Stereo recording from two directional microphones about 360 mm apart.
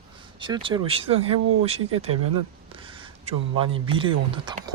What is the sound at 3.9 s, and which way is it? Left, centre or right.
Speech, centre.